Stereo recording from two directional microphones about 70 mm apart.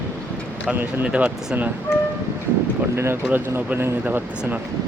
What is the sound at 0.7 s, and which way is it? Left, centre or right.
Speech, right.